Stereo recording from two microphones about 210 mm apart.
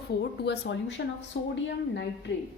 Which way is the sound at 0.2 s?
55° left (ahead or behind).